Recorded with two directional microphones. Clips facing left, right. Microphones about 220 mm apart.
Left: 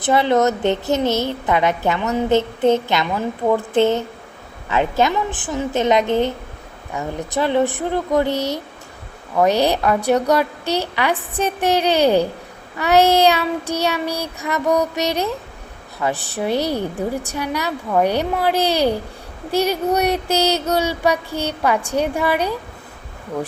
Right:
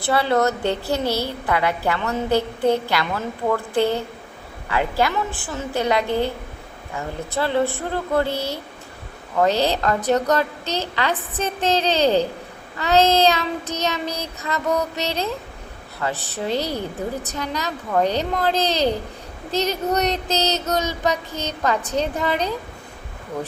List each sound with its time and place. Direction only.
0.0 s a woman's voice: 20° left (ahead or behind)